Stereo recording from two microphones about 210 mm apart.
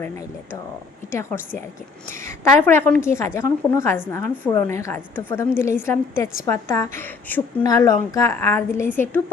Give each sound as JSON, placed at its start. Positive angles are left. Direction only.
{"t": 2.0, "sound": "a woman's voice", "side_deg": 10}